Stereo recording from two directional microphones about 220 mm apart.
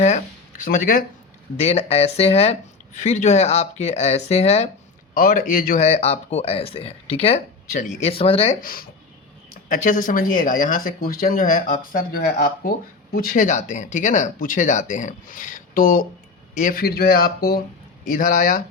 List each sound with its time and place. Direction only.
0.0 s a sound: 35° left (ahead or behind)
1.5 s speech: 30° left (ahead or behind)
5.1 s speech: 40° left (ahead or behind)
8.6 s speech: 40° left (ahead or behind)